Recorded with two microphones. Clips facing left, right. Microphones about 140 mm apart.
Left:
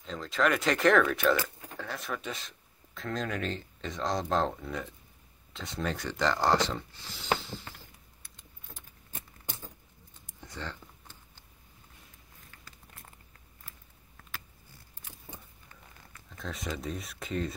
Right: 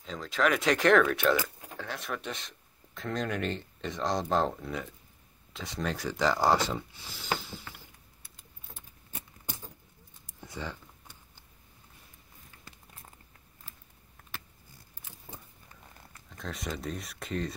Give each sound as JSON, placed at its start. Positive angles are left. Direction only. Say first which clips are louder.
{"t": 0.0, "sound": "speech", "louder": "even", "side_deg": 0}
{"t": 10.4, "sound": "a sound", "louder": "right 2 dB", "side_deg": -10}
{"t": 16.3, "sound": "speech", "louder": "even", "side_deg": 0}